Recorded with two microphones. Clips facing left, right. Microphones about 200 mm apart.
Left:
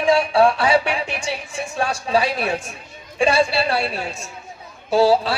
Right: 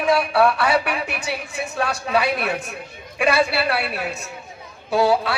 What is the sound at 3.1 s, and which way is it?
A woman's voice, 30° left (ahead or behind).